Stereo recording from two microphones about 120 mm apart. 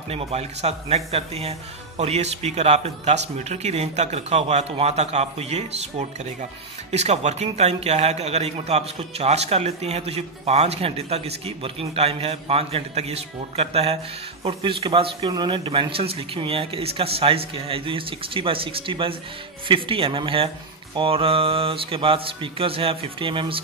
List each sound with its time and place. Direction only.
0.1 s a man's voice: 60° right (ahead or behind)
14.4 s speech: 50° right (ahead or behind)